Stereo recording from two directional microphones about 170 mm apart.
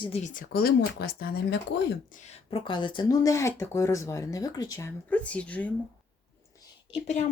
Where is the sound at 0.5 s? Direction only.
70° left (ahead or behind).